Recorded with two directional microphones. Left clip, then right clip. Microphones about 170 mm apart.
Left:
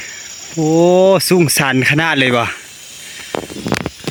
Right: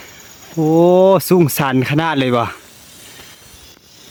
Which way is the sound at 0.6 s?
10° right (ahead or behind).